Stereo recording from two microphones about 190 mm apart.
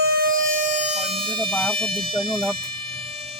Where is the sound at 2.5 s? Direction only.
30° right (ahead or behind).